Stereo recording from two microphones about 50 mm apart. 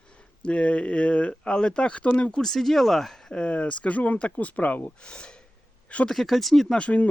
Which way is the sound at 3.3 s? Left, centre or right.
Left.